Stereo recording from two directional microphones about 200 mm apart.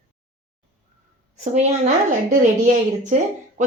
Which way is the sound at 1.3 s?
35° right (ahead or behind).